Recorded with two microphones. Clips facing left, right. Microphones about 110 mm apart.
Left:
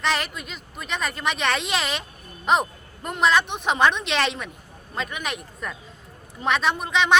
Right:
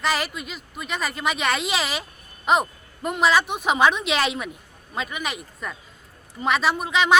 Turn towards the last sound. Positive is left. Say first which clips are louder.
# right 1 dB
turn(degrees=-5)  # may be behind; listen again after turning